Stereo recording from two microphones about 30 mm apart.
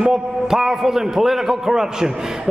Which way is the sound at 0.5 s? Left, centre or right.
Centre.